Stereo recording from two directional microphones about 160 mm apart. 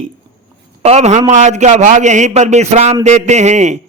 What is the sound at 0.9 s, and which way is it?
A man's voice, 45° right (ahead or behind).